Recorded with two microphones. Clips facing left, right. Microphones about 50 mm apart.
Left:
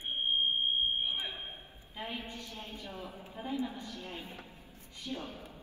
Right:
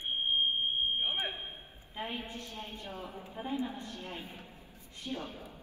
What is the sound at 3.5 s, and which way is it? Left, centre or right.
Speech, right.